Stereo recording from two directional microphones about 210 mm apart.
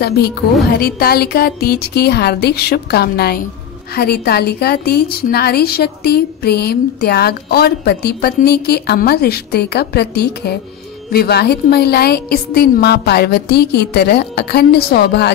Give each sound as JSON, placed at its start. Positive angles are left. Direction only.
{"t": 0.0, "sound": "a woman's voice", "side_deg": 50}